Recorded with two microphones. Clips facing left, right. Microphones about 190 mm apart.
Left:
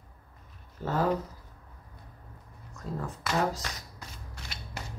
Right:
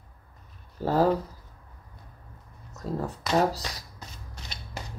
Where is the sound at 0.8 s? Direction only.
35° right (ahead or behind).